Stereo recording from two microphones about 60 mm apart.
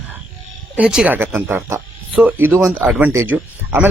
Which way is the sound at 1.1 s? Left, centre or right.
Right.